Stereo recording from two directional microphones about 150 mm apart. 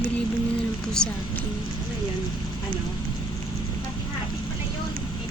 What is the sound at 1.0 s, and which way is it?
Speech, 5° left (ahead or behind).